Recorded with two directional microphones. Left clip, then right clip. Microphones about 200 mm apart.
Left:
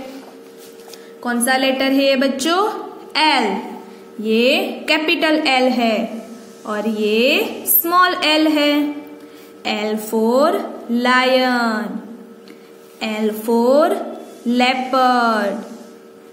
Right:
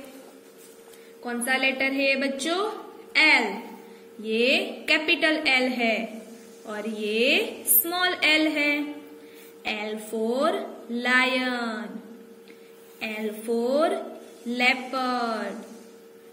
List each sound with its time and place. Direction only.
1.2 s a woman's voice: 35° left (ahead or behind)
13.0 s a woman's voice: 35° left (ahead or behind)